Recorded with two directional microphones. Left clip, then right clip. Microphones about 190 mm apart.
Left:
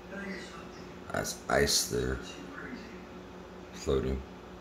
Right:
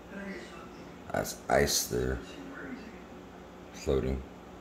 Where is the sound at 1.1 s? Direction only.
15° right (ahead or behind).